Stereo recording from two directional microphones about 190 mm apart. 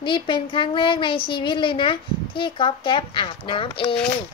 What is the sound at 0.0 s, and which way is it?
Speech, 25° left (ahead or behind).